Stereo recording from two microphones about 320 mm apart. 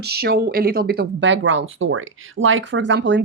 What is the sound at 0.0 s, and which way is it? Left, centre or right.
Speech, right.